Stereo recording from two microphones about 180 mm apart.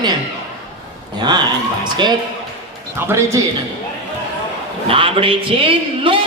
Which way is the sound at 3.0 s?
15° right (ahead or behind).